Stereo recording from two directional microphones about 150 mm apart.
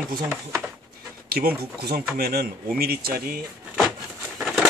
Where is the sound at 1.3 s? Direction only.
90° right.